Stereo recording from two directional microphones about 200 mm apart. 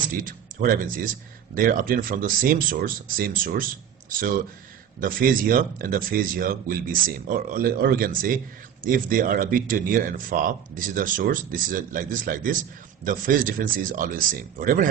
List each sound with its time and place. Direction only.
0.1 s speech: 45° right (ahead or behind)